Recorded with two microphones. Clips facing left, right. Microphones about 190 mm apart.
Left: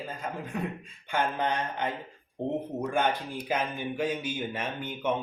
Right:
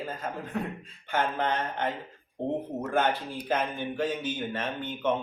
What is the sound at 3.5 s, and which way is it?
Speech, 10° left (ahead or behind).